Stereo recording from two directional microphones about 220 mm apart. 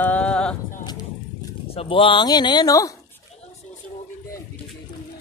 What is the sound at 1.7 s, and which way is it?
Speech, 25° left (ahead or behind).